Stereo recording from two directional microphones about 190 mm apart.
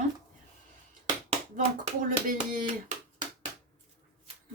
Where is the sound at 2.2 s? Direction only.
45° right (ahead or behind).